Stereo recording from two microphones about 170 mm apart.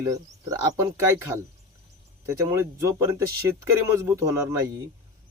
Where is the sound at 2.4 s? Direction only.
20° right (ahead or behind).